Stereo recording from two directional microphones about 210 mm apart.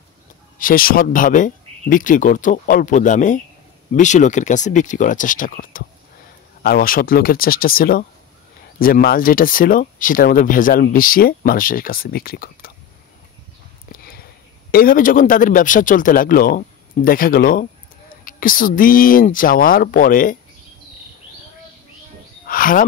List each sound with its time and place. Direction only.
0.6 s a man's voice: 40° left (ahead or behind)
13.9 s sniff: 45° left (ahead or behind)
14.7 s a man's voice: 45° left (ahead or behind)
22.5 s speech: 40° left (ahead or behind)